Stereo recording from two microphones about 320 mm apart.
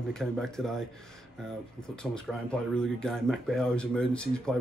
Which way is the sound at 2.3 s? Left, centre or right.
Centre.